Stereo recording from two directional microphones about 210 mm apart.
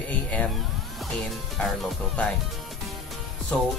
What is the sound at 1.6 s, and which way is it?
Speech, centre (ahead or behind).